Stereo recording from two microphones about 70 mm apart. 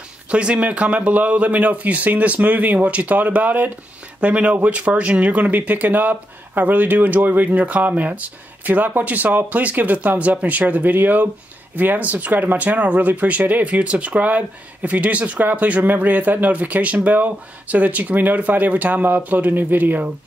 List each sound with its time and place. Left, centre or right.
0.3 s speech: centre